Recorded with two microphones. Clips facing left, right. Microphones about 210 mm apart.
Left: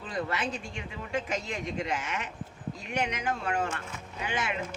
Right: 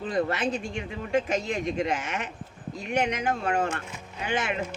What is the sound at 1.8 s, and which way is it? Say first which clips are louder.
Speech: right 4 dB; 45° right (ahead or behind).